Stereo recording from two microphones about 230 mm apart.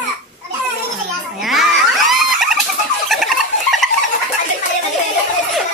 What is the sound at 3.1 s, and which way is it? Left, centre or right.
Bird, centre.